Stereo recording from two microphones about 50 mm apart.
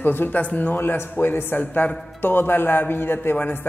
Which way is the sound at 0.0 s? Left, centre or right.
Left.